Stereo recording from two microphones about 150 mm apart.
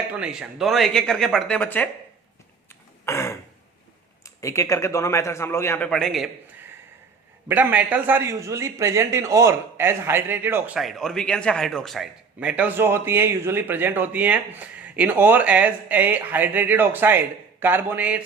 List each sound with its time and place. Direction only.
0.1 s speech: 5° right (ahead or behind); by 1.9 s 10° left (ahead or behind)
3.1 s throat clearing: 20° left (ahead or behind)
4.4 s a man's voice: 20° left (ahead or behind)
5.9 s speech: centre (ahead or behind)
7.4 s a man's voice: 10° right (ahead or behind)
10.8 s a man's voice: centre (ahead or behind)